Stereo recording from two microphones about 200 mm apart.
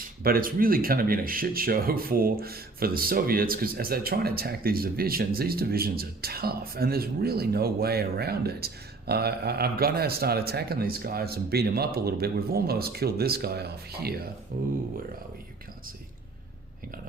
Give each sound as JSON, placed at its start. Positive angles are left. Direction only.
{"t": 0.2, "sound": "speech", "side_deg": -45}